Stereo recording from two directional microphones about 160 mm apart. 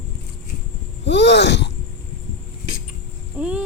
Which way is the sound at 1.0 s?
90° left.